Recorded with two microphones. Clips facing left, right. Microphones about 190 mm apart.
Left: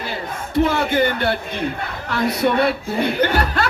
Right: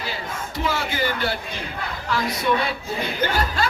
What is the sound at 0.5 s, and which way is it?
Speech, 55° left (ahead or behind).